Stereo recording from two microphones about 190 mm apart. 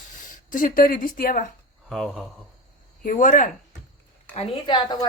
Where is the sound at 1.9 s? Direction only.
Centre (ahead or behind).